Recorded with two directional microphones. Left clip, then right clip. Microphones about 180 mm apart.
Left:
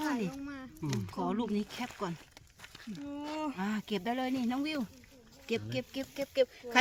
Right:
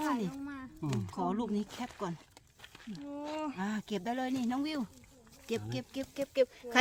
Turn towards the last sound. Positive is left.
turn(degrees=-5)  # may be behind; listen again after turning